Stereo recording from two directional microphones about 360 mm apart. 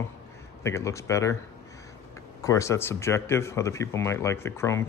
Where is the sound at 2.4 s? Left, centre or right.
Centre.